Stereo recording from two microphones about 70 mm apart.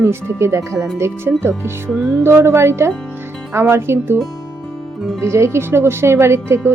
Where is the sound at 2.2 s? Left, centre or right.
Right.